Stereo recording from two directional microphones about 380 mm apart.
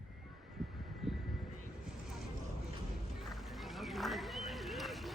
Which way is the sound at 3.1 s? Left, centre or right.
Centre.